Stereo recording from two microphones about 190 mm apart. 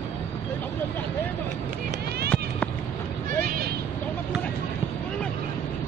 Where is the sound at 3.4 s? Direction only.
50° right (ahead or behind).